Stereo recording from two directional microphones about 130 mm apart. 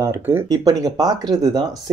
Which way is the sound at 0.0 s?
20° right (ahead or behind).